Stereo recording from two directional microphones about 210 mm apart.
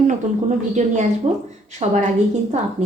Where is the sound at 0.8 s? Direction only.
35° right (ahead or behind).